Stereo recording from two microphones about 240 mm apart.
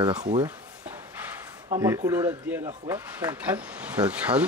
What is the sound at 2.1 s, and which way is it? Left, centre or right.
Speech, centre.